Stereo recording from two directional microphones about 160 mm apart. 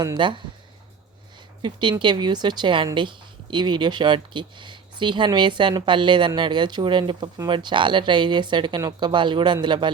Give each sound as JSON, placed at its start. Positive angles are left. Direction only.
{"t": 0.0, "sound": "speech", "side_deg": -30}
{"t": 1.6, "sound": "speech", "side_deg": -30}